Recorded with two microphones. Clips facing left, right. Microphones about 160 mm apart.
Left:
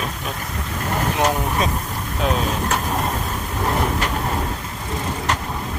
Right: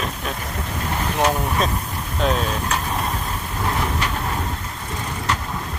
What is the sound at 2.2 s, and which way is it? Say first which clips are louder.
Speech: even; centre (ahead or behind).